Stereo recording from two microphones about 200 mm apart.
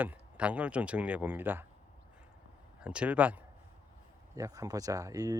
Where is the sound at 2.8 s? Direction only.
5° right (ahead or behind).